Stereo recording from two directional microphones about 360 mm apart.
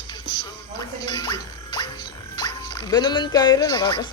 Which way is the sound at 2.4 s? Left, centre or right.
Centre.